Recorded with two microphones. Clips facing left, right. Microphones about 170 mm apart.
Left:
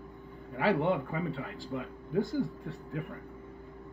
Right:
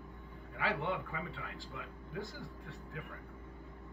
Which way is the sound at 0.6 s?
35° left (ahead or behind).